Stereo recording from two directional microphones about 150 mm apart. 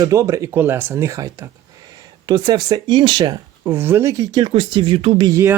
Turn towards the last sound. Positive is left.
turn(degrees=-20)  # may be behind; listen again after turning